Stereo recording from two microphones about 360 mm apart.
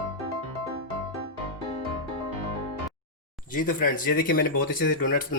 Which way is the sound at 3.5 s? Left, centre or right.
Left.